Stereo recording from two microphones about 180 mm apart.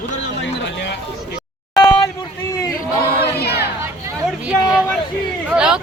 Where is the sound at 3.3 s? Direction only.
65° left (ahead or behind).